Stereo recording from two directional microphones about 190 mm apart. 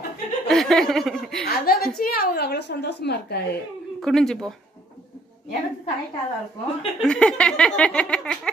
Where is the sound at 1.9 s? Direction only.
50° left (ahead or behind).